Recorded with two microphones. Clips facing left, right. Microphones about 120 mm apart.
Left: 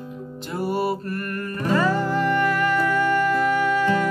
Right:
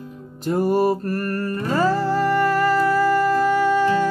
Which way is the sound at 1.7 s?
35° right (ahead or behind).